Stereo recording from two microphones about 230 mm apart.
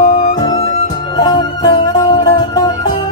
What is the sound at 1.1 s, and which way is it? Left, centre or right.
Music, centre.